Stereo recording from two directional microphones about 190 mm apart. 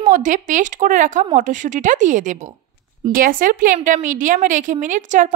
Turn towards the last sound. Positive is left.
turn(degrees=-40)  # may be behind; listen again after turning